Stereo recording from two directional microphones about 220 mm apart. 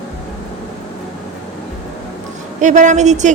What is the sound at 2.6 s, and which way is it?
Speech, 35° right (ahead or behind).